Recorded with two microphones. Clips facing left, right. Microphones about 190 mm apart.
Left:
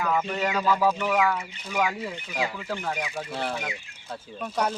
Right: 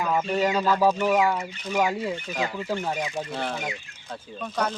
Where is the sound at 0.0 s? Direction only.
25° right (ahead or behind).